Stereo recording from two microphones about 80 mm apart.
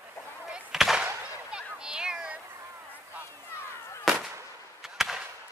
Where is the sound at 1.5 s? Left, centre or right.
Centre.